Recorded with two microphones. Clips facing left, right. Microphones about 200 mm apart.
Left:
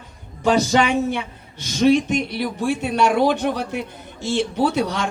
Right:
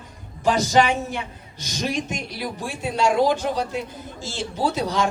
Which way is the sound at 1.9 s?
65° left (ahead or behind).